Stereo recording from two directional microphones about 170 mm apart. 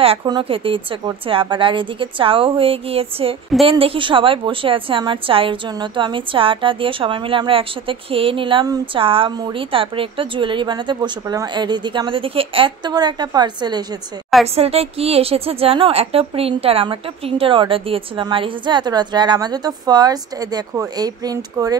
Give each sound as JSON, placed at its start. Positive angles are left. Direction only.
{"t": 0.0, "sound": "a woman's voice", "side_deg": -30}
{"t": 14.5, "sound": "a woman's voice", "side_deg": -35}